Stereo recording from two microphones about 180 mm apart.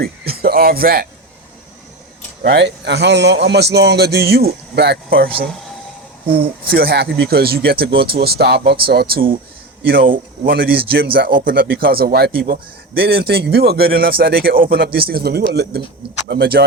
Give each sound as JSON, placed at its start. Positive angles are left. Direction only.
{"t": 0.0, "sound": "speech", "side_deg": -60}
{"t": 2.4, "sound": "a man's voice", "side_deg": -75}
{"t": 10.4, "sound": "speech", "side_deg": -55}